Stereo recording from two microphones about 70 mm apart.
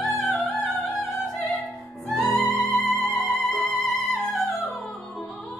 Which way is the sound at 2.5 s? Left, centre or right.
Left.